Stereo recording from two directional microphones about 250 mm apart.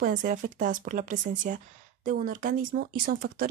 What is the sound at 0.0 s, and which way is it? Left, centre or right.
Speech, right.